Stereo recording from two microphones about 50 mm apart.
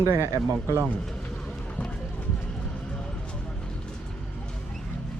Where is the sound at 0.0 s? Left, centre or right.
Right.